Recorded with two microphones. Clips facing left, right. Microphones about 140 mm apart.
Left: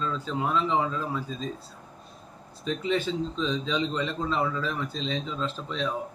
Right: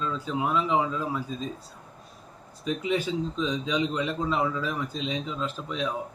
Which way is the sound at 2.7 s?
10° right (ahead or behind).